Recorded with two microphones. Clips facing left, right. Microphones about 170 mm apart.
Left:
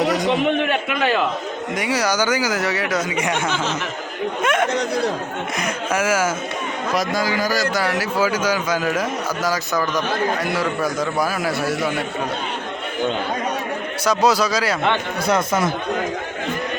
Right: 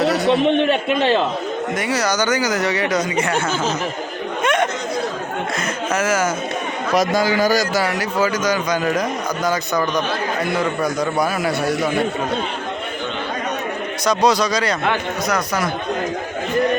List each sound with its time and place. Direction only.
0.0 s speech: 15° left (ahead or behind)
0.4 s a man's voice: 30° right (ahead or behind)
1.7 s speech: 10° left (ahead or behind)
4.4 s chatter: 5° left (ahead or behind)
5.5 s speech: 10° left (ahead or behind)
6.9 s a man's voice: 20° right (ahead or behind)
7.7 s a man's voice: centre (ahead or behind)
10.8 s a man's voice: centre (ahead or behind)
14.0 s a man's voice: 5° left (ahead or behind)
15.3 s speech: 25° left (ahead or behind)